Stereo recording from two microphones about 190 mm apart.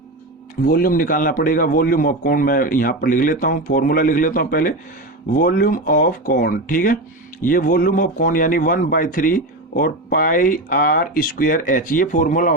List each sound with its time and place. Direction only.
0.6 s a man's voice: 50° left (ahead or behind)